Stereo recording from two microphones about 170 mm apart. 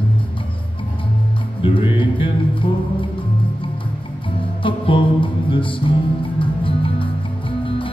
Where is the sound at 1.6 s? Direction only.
30° left (ahead or behind).